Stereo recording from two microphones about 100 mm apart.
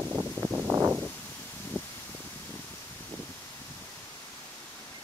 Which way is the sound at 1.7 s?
20° left (ahead or behind).